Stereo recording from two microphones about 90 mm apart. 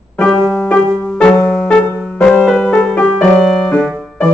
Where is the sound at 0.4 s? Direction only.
15° left (ahead or behind).